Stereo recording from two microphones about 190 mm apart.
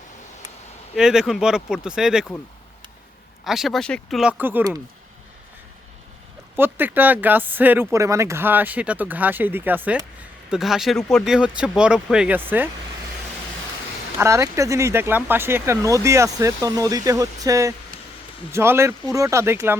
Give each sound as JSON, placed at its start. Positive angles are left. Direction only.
{"t": 0.9, "sound": "speech", "side_deg": -5}
{"t": 3.4, "sound": "speech", "side_deg": 0}
{"t": 6.6, "sound": "speech", "side_deg": -10}
{"t": 14.2, "sound": "speech", "side_deg": -15}